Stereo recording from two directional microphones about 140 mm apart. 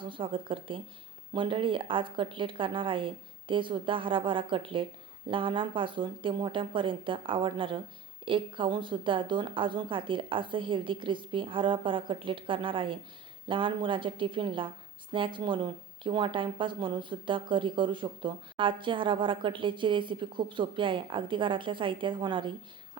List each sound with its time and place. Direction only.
0.0 s speech: 35° right (ahead or behind)